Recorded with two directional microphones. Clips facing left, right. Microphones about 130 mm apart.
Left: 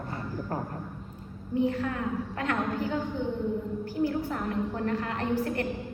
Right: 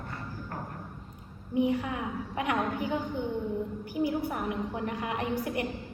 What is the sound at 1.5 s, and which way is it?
A woman's voice, 15° right (ahead or behind).